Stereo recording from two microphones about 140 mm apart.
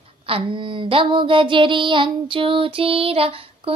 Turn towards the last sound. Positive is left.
turn(degrees=-40)  # may be behind; listen again after turning